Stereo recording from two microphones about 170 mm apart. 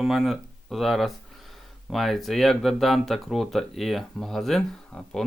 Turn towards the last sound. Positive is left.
turn(degrees=5)  # may be behind; listen again after turning